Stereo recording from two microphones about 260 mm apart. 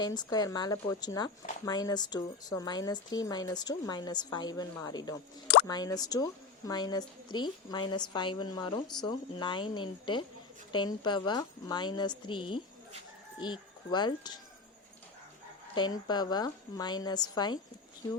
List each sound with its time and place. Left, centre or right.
0.0 s speech: centre
15.7 s speech: centre